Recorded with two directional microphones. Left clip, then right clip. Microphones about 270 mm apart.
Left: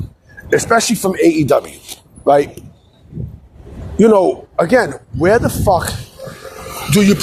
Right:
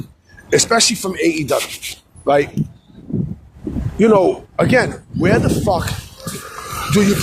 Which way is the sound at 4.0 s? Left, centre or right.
Left.